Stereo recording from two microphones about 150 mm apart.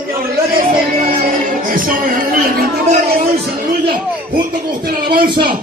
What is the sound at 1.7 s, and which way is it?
Speech, 70° right (ahead or behind).